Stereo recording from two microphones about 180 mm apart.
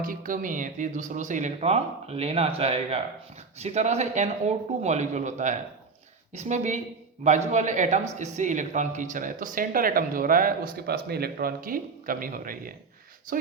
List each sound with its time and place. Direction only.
0.0 s a man's voice: 50° right (ahead or behind)